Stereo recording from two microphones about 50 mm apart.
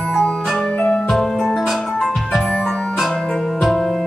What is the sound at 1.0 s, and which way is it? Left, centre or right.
Music, centre.